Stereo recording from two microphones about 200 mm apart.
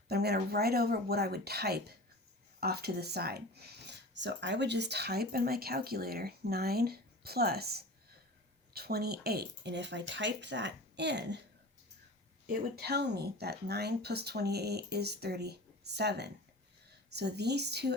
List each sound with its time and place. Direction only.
0.1 s speech: 55° right (ahead or behind)
12.5 s speech: 50° right (ahead or behind)